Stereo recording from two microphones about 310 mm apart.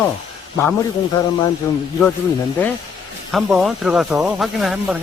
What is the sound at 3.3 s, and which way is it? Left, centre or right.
Speech, centre.